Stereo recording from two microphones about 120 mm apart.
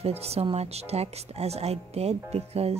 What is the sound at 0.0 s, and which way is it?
Speech, 60° right (ahead or behind).